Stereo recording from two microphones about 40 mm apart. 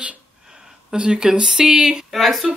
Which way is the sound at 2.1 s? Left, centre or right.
Centre.